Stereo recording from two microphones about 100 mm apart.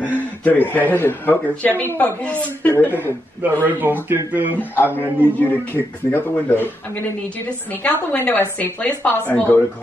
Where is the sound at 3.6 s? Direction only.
20° right (ahead or behind).